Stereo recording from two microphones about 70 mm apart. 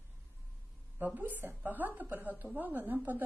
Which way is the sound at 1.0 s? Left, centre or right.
Right.